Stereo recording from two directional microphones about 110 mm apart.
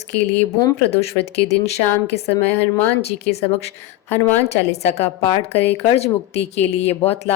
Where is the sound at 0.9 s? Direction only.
70° left (ahead or behind).